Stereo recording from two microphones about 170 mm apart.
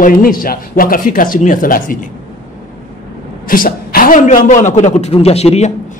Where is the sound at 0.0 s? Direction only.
55° left (ahead or behind).